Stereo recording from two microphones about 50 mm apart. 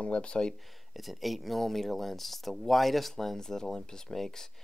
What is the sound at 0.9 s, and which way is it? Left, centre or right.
Speech, centre.